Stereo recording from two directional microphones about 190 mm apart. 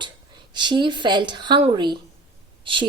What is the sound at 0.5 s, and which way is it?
Speech, 25° right (ahead or behind).